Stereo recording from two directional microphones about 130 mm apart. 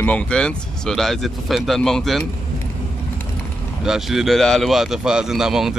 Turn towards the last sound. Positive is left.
turn(degrees=-5)  # may be behind; listen again after turning